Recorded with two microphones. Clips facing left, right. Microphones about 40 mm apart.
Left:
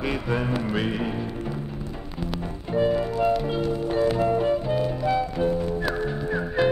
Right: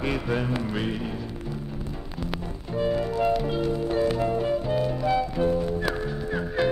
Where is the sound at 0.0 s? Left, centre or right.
Centre.